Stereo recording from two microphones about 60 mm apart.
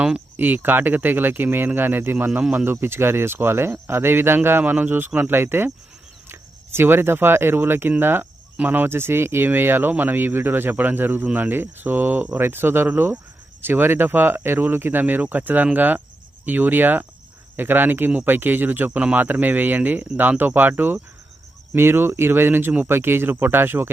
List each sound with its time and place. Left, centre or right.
0.3 s speech: right
18.9 s speech: centre
19.1 s speech: right